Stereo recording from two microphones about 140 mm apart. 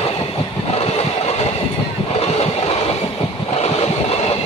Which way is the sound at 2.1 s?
45° left (ahead or behind).